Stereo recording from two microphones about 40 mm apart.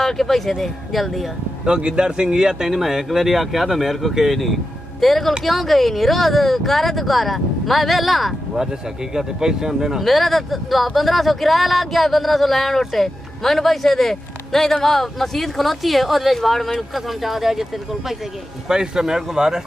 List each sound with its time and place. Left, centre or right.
0.0 s speech: centre
1.7 s speech: right
2.7 s speech: centre
9.1 s speech: centre
10.0 s speech: centre